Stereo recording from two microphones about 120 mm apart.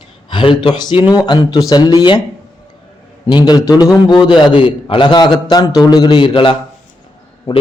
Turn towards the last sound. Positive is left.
turn(degrees=40)  # may be behind; listen again after turning